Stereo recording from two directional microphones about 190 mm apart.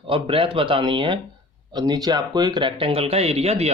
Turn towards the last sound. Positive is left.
turn(degrees=-35)  # may be behind; listen again after turning